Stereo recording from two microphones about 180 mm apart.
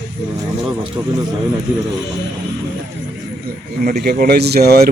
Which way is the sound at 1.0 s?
15° right (ahead or behind).